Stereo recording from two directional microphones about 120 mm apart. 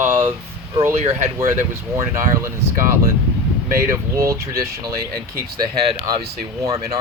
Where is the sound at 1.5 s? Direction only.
20° right (ahead or behind).